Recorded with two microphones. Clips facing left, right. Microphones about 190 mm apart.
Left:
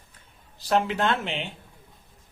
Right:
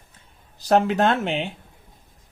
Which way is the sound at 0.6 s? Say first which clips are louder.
Right 5 dB; 45° right (ahead or behind).